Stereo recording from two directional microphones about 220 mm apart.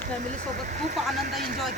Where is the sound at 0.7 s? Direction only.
40° right (ahead or behind).